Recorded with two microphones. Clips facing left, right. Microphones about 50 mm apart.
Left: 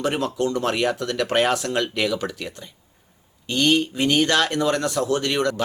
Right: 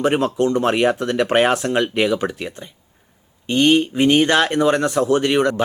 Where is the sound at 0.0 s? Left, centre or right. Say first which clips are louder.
Right 5 dB; right.